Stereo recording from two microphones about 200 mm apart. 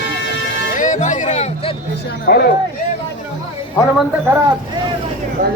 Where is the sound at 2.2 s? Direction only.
50° left (ahead or behind).